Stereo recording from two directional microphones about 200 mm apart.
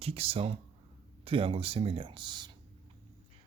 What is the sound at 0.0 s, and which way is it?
Speech, 30° right (ahead or behind).